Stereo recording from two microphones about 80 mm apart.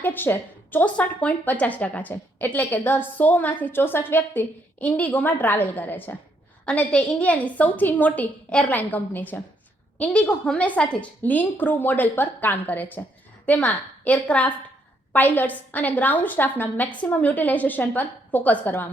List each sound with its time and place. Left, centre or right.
0.0 s a woman's voice: left
6.7 s a woman's voice: centre